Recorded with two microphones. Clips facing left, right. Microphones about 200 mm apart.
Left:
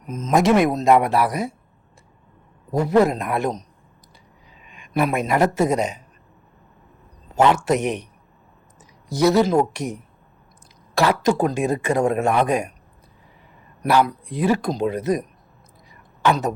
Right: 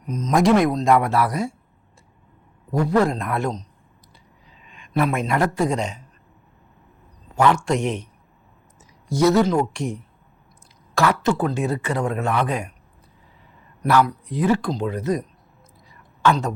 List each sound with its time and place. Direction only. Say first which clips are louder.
0.1 s speech: even; 5° left (ahead or behind)
0.9 s speech: left 2 dB; 20° left (ahead or behind)
2.7 s speech: left 2 dB; 25° left (ahead or behind)
4.7 s a sound: left 1 dB; 15° left (ahead or behind)
7.3 s a man's voice: left 1 dB; 20° left (ahead or behind)
9.0 s speech: even; 15° left (ahead or behind)
10.9 s speech: left 1 dB; 15° left (ahead or behind)
13.8 s speech: even; 25° left (ahead or behind)
14.3 s speech: even; 10° left (ahead or behind)
15.9 s a sound: even; 15° left (ahead or behind)